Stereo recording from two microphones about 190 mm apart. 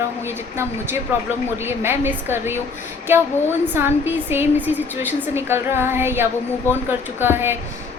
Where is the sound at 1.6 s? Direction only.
10° right (ahead or behind).